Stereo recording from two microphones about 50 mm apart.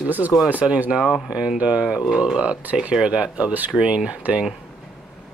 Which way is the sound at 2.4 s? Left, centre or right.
Right.